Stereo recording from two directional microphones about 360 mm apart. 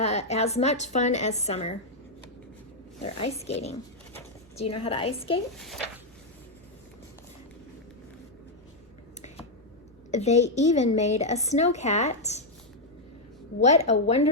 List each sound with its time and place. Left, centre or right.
0.0 s a woman's voice: centre
3.0 s a woman's voice: centre
4.5 s a woman's voice: left
4.8 s a woman's voice: centre
5.5 s a child's voice: centre
10.1 s a woman's voice: centre
13.6 s a woman's voice: centre